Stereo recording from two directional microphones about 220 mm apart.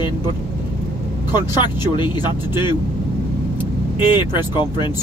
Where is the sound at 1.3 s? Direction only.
20° left (ahead or behind).